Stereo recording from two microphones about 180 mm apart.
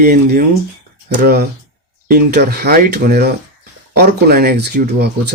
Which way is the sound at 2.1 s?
60° right (ahead or behind).